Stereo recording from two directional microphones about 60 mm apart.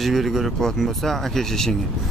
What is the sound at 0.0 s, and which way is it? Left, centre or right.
Speech, centre.